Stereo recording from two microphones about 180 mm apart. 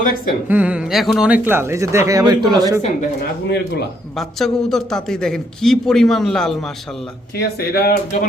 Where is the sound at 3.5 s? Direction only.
70° left (ahead or behind).